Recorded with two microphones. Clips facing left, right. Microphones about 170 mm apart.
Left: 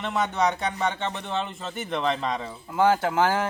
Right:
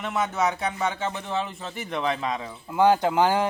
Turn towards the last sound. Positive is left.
turn(degrees=-15)  # may be behind; listen again after turning